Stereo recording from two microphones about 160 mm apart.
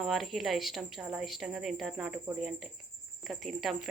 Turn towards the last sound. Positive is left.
turn(degrees=0)  # may be behind; listen again after turning